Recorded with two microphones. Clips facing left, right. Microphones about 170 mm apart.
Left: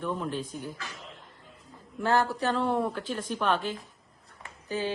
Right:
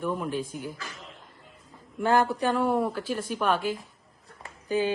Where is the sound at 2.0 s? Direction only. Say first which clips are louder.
Right 3 dB; 15° right (ahead or behind).